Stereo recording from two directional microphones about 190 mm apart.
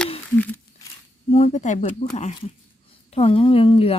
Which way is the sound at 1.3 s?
30° left (ahead or behind).